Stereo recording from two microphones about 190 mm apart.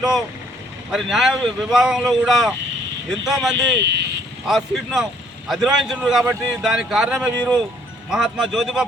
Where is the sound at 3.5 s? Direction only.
65° right (ahead or behind).